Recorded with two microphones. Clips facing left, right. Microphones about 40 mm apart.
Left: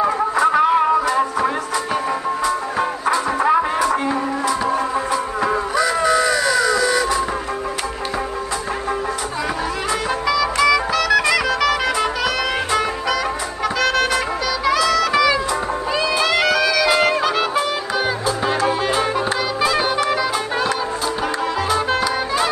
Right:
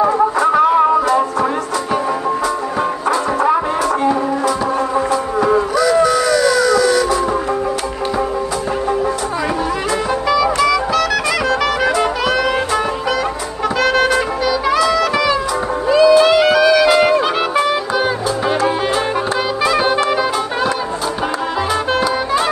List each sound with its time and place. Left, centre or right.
0.0 s music: centre
5.1 s insect: centre
10.2 s music: centre
15.9 s music: centre
16.3 s music: centre
20.1 s music: centre
22.0 s music: centre